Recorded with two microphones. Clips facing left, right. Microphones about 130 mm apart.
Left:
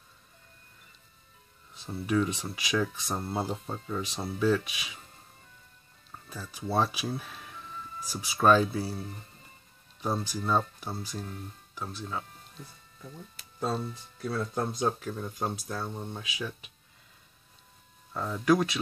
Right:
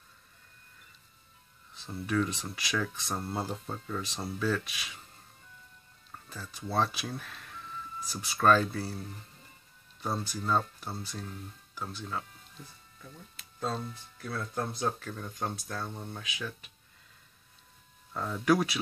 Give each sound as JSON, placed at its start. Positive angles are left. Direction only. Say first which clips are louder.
{"t": 1.9, "sound": "speech", "louder": "left 3 dB", "side_deg": 10}
{"t": 6.1, "sound": "music", "louder": "left 2 dB", "side_deg": 10}
{"t": 6.7, "sound": "speech", "louder": "left 2 dB", "side_deg": 10}
{"t": 10.0, "sound": "speech", "louder": "left 2 dB", "side_deg": 10}
{"t": 13.6, "sound": "speech", "louder": "left 3 dB", "side_deg": 20}
{"t": 18.1, "sound": "speech", "louder": "left 2 dB", "side_deg": 0}